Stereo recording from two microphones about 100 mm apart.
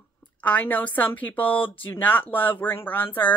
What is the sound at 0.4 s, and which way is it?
Speech, 15° left (ahead or behind).